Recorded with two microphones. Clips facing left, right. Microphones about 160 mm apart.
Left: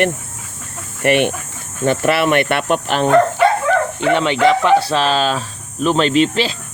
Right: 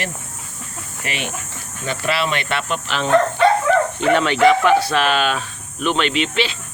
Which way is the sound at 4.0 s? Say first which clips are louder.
Left 1 dB; 20° left (ahead or behind).